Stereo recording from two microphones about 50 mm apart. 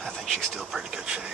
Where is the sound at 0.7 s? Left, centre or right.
Centre.